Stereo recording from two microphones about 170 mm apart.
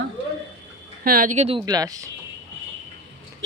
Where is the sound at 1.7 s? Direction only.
20° right (ahead or behind).